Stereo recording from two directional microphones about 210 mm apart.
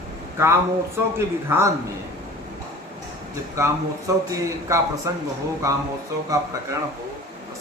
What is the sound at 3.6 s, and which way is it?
A woman's voice, 15° right (ahead or behind).